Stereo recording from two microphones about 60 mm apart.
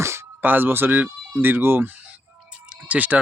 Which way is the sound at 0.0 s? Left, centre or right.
Right.